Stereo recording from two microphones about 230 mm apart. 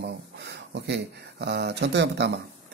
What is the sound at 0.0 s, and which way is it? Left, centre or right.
Speech, right.